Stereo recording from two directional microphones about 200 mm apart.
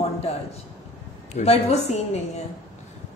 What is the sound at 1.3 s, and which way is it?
Speech, 35° left (ahead or behind).